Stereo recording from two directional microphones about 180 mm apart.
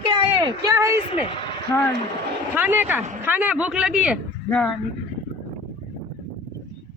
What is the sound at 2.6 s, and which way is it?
A man's voice, 10° right (ahead or behind).